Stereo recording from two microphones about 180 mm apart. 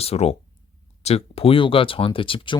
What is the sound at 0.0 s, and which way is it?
Speech, 35° left (ahead or behind).